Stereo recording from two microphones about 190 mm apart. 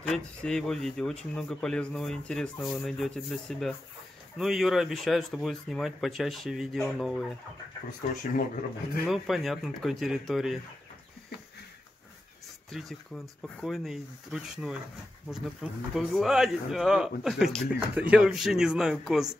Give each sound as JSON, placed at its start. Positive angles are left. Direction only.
{"t": 0.0, "sound": "speech", "side_deg": 5}
{"t": 8.0, "sound": "speech", "side_deg": 40}
{"t": 9.0, "sound": "speech", "side_deg": 0}
{"t": 12.7, "sound": "speech", "side_deg": 0}